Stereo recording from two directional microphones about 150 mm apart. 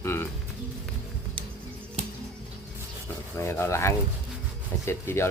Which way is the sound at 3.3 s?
20° left (ahead or behind).